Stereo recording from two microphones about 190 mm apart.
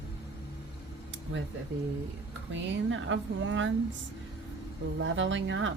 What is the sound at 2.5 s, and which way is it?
A woman's voice, 80° right.